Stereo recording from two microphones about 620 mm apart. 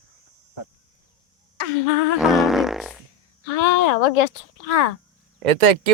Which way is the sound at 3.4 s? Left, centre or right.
Left.